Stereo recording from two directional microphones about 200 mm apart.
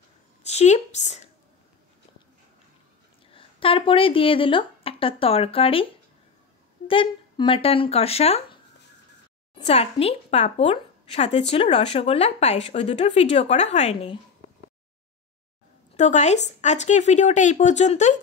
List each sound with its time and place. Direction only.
0.4 s a woman's voice: 35° left (ahead or behind)
3.3 s speech: 25° left (ahead or behind)
6.9 s speech: 25° left (ahead or behind)
9.7 s a woman's voice: 30° left (ahead or behind)
15.9 s a woman's voice: 35° left (ahead or behind)